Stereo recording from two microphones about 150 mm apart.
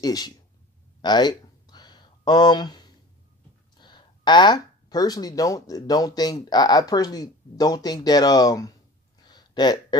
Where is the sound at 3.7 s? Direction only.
30° left (ahead or behind).